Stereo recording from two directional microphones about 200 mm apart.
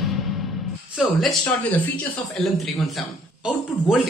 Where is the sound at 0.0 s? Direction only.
Centre (ahead or behind).